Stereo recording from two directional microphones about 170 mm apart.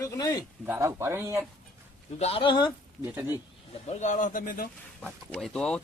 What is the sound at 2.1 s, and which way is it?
Speech, 35° left (ahead or behind).